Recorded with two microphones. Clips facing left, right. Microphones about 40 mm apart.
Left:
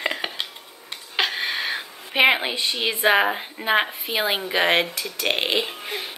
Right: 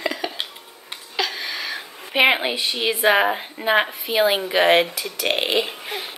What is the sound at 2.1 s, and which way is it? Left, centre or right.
A woman's voice, centre.